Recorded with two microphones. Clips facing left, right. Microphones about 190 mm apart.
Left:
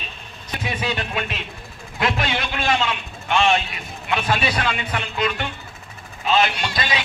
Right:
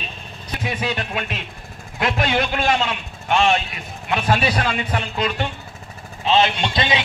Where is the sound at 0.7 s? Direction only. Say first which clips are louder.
Right 1 dB; 45° right (ahead or behind).